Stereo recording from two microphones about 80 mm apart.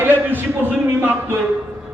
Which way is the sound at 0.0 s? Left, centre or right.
Right.